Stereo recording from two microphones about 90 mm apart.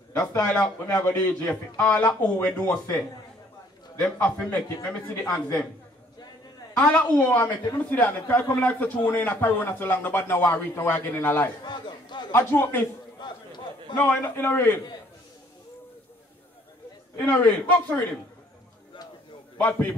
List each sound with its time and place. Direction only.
0.2 s speech: 35° left (ahead or behind)
0.9 s a man's voice: 20° left (ahead or behind)
4.0 s a man's voice: 15° left (ahead or behind)
6.8 s speech: 15° left (ahead or behind)
11.6 s speech: 60° left (ahead or behind)
12.3 s speech: 25° left (ahead or behind)
13.2 s a sound: 55° left (ahead or behind)
13.9 s speech: 20° left (ahead or behind)
17.2 s a man's voice: 20° left (ahead or behind)